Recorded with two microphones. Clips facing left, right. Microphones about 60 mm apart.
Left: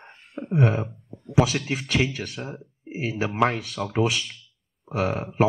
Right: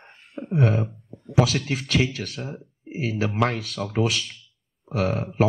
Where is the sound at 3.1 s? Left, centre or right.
Left.